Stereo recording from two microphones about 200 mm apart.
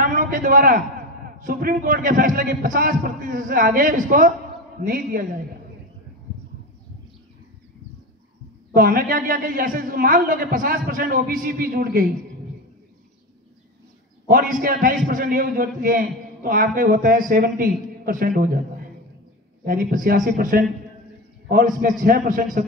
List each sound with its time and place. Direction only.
0.0 s a man's voice: 40° right (ahead or behind)
8.7 s a man's voice: 45° right (ahead or behind)
14.2 s a man's voice: 45° right (ahead or behind)
19.6 s a man's voice: 45° right (ahead or behind)